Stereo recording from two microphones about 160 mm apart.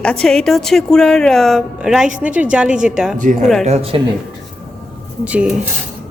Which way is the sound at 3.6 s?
40° right (ahead or behind).